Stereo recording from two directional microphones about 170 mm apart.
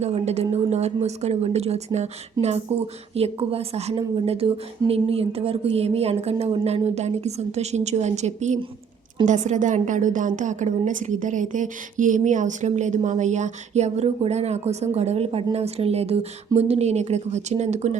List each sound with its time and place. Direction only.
0.0 s a woman's voice: 40° right (ahead or behind)